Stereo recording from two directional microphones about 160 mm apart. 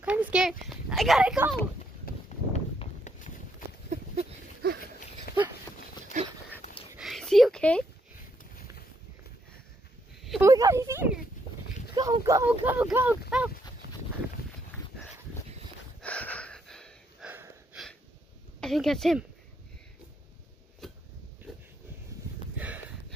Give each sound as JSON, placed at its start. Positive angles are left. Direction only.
{"t": 0.0, "sound": "speech", "side_deg": -5}
{"t": 2.2, "sound": "walk", "side_deg": 45}
{"t": 4.6, "sound": "a sound", "side_deg": -75}
{"t": 5.3, "sound": "horse", "side_deg": 75}
{"t": 6.1, "sound": "dog", "side_deg": -50}
{"t": 6.6, "sound": "a sound", "side_deg": 35}
{"t": 7.0, "sound": "a sound", "side_deg": 0}
{"t": 10.4, "sound": "speech", "side_deg": -20}
{"t": 12.4, "sound": "speech", "side_deg": -10}
{"t": 16.0, "sound": "gasp", "side_deg": 10}
{"t": 18.6, "sound": "speech", "side_deg": 0}
{"t": 20.8, "sound": "a sound", "side_deg": 0}